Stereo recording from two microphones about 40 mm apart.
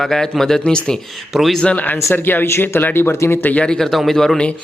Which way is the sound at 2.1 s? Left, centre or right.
Left.